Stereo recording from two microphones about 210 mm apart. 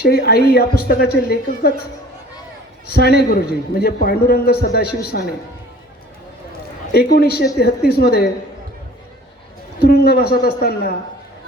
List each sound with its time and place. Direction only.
0.0 s a man's voice: 50° left (ahead or behind)
2.8 s a man's voice: 50° left (ahead or behind)
6.9 s a man's voice: 50° left (ahead or behind)
9.8 s a man's voice: 50° left (ahead or behind)